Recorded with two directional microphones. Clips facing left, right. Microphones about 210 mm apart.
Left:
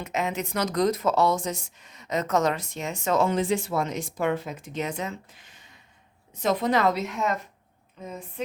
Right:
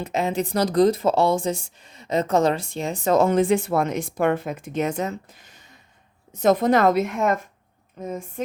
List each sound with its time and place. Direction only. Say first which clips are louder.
0.0 s a woman's voice: right 5 dB; 30° right (ahead or behind); by 8.1 s 50° right (ahead or behind)